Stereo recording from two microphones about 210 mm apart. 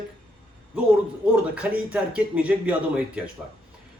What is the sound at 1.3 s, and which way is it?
Speech, 5° right (ahead or behind).